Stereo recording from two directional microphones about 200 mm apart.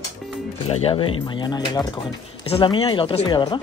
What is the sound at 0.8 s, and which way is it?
Speech, 25° left (ahead or behind).